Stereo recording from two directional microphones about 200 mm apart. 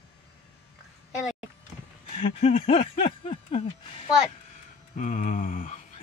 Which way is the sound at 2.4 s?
30° left (ahead or behind).